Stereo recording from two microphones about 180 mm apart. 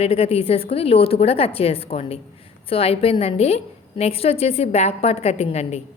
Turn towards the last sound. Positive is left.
turn(degrees=35)  # may be behind; listen again after turning